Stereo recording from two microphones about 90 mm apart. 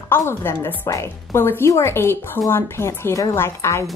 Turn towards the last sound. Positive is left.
turn(degrees=30)  # may be behind; listen again after turning